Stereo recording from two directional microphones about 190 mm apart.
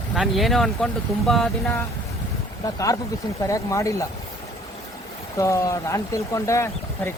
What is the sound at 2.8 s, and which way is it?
Speech, 15° left (ahead or behind).